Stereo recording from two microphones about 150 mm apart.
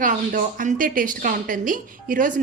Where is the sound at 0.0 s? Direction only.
60° right (ahead or behind).